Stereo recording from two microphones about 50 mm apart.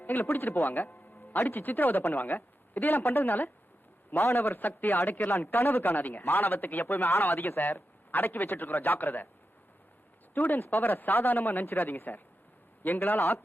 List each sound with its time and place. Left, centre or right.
0.0 s speech: left
4.2 s speech: left
5.3 s speech: left
7.1 s speech: left
7.6 s speech: left
10.3 s speech: left